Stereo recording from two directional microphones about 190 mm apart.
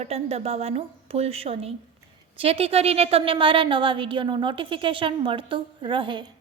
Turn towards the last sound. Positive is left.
turn(degrees=-25)  # may be behind; listen again after turning